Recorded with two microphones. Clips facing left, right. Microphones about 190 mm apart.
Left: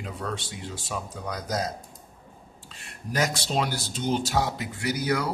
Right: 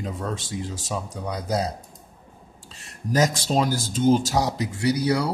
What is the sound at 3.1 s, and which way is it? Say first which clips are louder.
Speech: right 5 dB; 40° right (ahead or behind).